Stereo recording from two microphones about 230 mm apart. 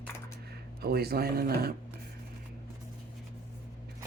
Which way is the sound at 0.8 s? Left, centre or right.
Right.